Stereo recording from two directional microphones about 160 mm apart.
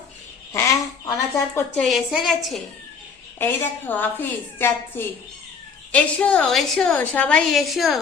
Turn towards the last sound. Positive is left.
turn(degrees=0)  # may be behind; listen again after turning